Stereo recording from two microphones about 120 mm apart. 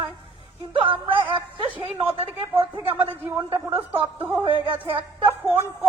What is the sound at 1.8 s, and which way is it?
A man's voice, 45° right (ahead or behind).